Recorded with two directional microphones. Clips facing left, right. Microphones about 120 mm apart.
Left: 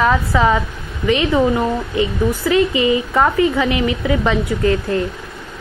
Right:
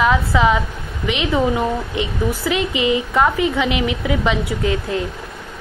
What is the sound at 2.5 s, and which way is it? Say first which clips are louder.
Speech: left 7 dB; 90° right.